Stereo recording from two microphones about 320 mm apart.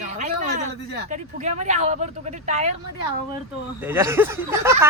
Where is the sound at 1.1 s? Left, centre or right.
Right.